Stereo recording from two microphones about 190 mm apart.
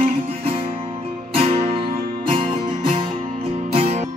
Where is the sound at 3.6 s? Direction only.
35° right (ahead or behind).